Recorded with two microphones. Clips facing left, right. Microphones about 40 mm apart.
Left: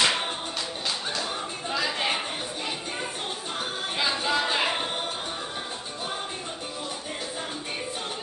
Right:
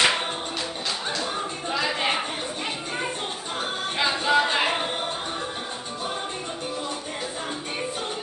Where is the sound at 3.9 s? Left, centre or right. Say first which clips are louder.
Right 5 dB; centre.